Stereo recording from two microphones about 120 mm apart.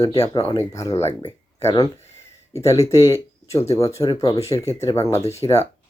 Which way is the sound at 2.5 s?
25° left (ahead or behind).